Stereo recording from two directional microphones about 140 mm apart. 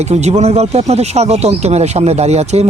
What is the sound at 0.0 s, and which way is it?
Speech, 50° right (ahead or behind).